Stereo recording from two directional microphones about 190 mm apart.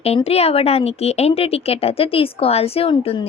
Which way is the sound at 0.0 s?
30° left (ahead or behind).